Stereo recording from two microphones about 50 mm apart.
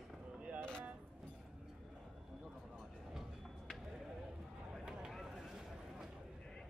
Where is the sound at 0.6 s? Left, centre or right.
Centre.